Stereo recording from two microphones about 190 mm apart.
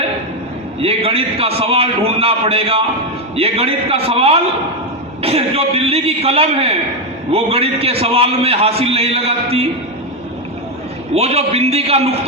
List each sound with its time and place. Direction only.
0.8 s a man's voice: 30° right (ahead or behind)
11.1 s a man's voice: 35° right (ahead or behind)